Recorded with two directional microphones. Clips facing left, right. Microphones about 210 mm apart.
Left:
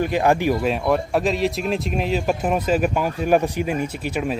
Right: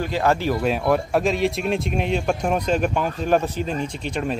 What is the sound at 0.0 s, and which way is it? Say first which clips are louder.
Speech: left 3 dB; 15° left (ahead or behind).